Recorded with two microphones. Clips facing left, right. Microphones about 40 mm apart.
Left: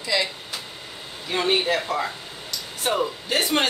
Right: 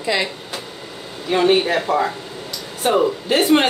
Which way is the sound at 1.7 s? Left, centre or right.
Right.